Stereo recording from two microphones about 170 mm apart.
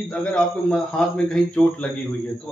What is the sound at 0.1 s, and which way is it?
A man's voice, 5° left (ahead or behind).